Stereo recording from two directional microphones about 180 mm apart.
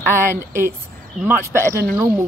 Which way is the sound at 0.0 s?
15° right (ahead or behind).